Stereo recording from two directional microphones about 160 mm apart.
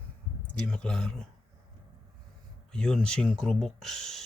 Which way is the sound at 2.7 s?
5° left (ahead or behind).